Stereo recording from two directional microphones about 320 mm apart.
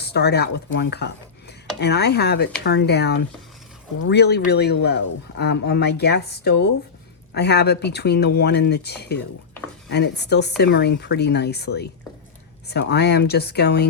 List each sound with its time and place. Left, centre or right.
0.0 s speech: left